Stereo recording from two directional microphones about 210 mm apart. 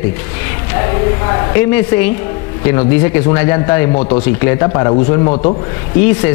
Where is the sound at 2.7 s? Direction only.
10° left (ahead or behind).